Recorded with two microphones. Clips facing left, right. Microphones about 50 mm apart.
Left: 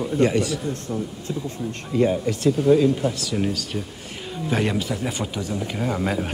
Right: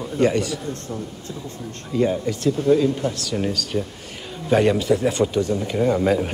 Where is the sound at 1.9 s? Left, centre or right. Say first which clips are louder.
Even; centre.